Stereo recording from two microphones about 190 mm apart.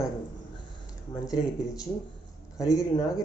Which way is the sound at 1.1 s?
20° left (ahead or behind).